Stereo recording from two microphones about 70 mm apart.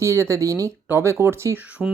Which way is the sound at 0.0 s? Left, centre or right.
Right.